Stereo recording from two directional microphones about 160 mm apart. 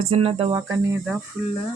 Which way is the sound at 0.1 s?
35° right (ahead or behind).